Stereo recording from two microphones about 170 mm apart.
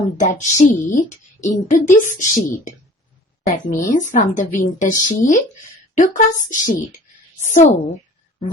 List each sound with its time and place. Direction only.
0.2 s a woman's voice: 45° left (ahead or behind)